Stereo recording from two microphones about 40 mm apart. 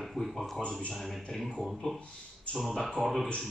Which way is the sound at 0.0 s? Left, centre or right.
Centre.